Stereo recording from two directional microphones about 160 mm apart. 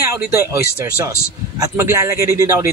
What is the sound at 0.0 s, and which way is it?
Speech, 15° right (ahead or behind).